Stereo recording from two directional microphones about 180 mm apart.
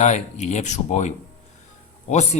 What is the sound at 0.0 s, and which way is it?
Speech, 40° left (ahead or behind).